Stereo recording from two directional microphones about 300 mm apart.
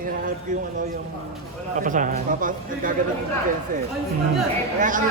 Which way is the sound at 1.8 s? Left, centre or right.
Right.